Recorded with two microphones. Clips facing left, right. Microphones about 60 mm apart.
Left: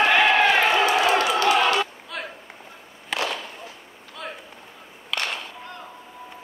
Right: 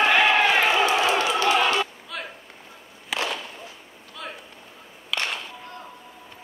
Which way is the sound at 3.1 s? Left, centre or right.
Centre.